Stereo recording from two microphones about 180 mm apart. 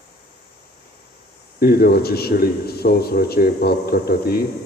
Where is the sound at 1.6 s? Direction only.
60° left (ahead or behind).